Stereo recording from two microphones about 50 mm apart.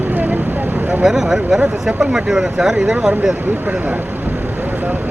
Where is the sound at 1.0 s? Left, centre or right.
Centre.